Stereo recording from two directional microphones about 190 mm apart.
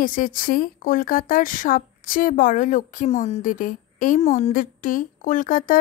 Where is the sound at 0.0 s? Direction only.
45° left (ahead or behind).